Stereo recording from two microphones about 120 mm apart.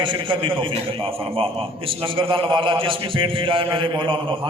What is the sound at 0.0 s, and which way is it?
A man's voice, 45° right (ahead or behind).